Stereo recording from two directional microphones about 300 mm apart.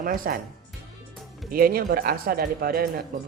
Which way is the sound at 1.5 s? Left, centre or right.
Right.